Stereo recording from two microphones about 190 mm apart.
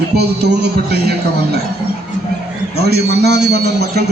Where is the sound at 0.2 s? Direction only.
55° right (ahead or behind).